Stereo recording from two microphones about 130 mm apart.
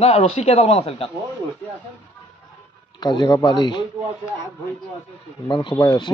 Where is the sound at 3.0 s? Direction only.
35° left (ahead or behind).